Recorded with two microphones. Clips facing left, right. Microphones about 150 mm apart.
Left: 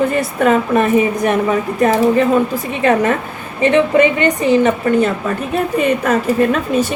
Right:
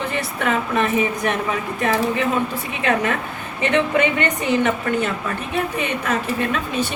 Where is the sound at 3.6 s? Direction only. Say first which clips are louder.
Left 7 dB; 35° left (ahead or behind).